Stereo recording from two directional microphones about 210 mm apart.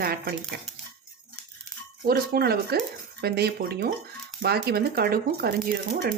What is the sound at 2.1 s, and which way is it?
Speech, 45° right (ahead or behind).